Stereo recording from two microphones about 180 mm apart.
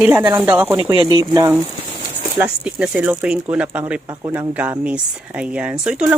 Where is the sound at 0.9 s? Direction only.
25° right (ahead or behind); by 3.9 s 5° right (ahead or behind).